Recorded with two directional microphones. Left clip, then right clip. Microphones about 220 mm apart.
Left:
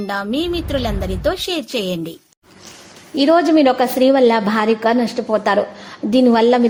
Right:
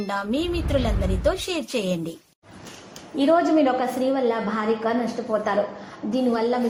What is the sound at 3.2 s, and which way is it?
A woman's voice, 40° left (ahead or behind).